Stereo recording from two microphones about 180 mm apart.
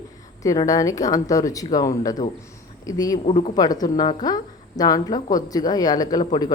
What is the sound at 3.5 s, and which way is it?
A woman's voice, 20° left (ahead or behind).